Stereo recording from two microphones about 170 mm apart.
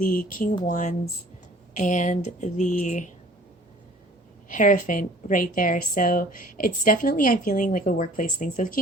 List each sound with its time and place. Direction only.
0.0 s a woman's voice: 55° left (ahead or behind)
4.5 s a woman's voice: 50° left (ahead or behind)